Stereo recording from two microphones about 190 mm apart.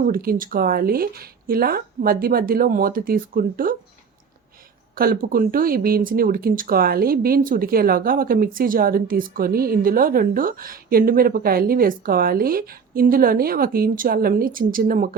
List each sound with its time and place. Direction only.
0.0 s speech: 50° right (ahead or behind)
4.9 s speech: 50° right (ahead or behind)